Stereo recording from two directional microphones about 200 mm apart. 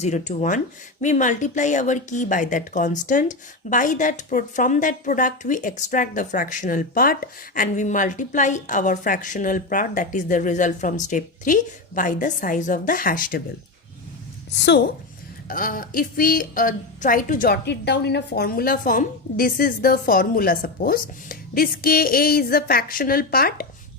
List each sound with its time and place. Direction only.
0.0 s speech: 35° left (ahead or behind)
15.4 s a woman's voice: 45° left (ahead or behind)